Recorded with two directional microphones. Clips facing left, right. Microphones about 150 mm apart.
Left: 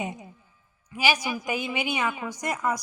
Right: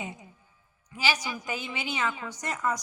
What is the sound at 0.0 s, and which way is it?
A woman's voice, 15° left (ahead or behind).